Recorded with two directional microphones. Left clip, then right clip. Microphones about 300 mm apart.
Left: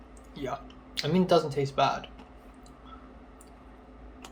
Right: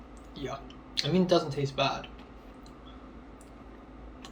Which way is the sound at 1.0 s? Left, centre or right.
Centre.